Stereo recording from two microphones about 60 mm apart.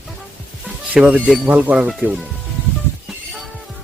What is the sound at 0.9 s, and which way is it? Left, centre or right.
Speech, right.